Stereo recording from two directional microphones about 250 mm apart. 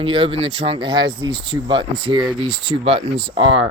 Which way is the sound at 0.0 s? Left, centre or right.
Right.